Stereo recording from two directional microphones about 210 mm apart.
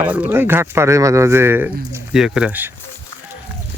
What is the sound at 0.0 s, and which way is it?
Speech, 5° right (ahead or behind).